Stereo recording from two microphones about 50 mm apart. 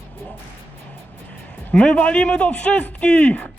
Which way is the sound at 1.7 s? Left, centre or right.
Centre.